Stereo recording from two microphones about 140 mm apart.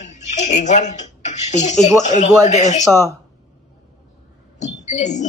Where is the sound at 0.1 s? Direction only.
55° left (ahead or behind).